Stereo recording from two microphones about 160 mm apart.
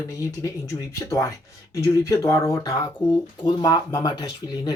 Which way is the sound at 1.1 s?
20° left (ahead or behind).